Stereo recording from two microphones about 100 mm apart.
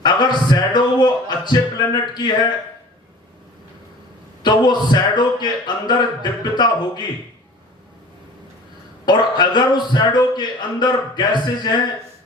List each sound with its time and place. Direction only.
0.0 s music: 50° left (ahead or behind)
4.4 s a man's voice: 45° left (ahead or behind)
9.0 s a man's voice: 45° left (ahead or behind)